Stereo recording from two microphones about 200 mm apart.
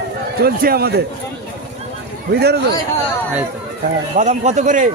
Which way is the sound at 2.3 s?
55° right (ahead or behind).